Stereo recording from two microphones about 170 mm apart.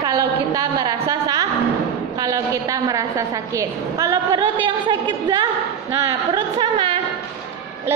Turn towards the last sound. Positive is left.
turn(degrees=-30)  # may be behind; listen again after turning